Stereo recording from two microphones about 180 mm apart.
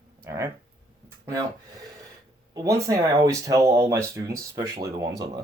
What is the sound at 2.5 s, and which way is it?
Speech, 20° right (ahead or behind).